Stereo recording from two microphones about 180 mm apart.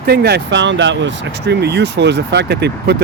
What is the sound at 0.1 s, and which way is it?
Speech, 65° right (ahead or behind).